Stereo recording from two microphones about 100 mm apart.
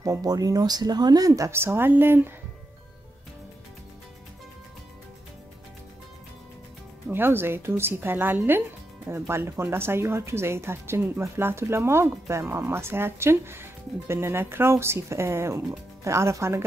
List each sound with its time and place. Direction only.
0.0 s speech: 35° right (ahead or behind); by 2.3 s 20° right (ahead or behind)
7.1 s speech: 20° right (ahead or behind)